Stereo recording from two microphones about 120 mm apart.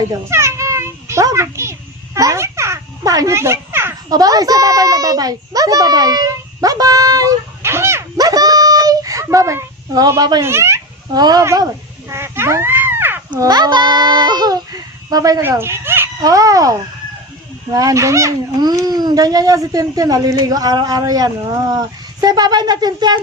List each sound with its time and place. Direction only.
0.1 s a sound: 25° right (ahead or behind)
4.1 s a child's voice: 30° right (ahead or behind)
10.4 s speech: 20° right (ahead or behind)
11.1 s a sound: 35° right (ahead or behind); by 13.4 s 15° right (ahead or behind)
13.4 s a child's voice: 35° right (ahead or behind)
15.4 s speech: 20° right (ahead or behind)
16.2 s speech: 30° right (ahead or behind)